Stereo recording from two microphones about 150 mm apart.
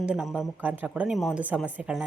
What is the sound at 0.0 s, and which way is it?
Speech, 5° right (ahead or behind).